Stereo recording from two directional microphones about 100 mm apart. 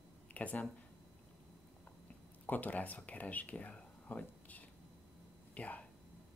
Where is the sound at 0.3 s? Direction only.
15° left (ahead or behind).